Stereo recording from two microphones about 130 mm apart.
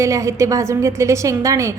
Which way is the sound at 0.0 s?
25° right (ahead or behind).